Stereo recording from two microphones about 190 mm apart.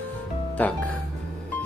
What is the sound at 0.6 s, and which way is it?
Speech, 10° left (ahead or behind).